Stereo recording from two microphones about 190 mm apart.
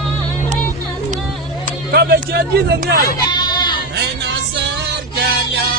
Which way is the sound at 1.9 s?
55° right (ahead or behind).